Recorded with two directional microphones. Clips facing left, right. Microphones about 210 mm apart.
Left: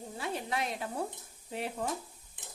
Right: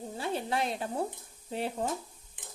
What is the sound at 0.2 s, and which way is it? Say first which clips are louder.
Stir: right 3 dB; 30° right (ahead or behind).